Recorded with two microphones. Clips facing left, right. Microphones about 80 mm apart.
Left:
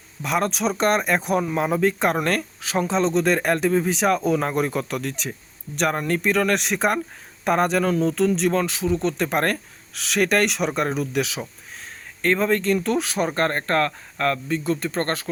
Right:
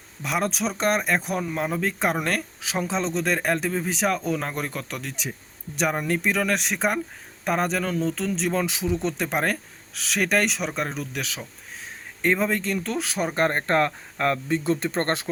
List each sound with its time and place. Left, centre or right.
0.2 s speech: centre
12.2 s speech: centre
13.3 s speech: centre